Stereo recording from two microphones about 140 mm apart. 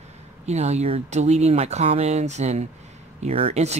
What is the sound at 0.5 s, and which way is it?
Speech, 50° right (ahead or behind).